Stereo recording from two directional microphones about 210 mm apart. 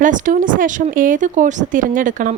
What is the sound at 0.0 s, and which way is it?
Speech, 40° right (ahead or behind).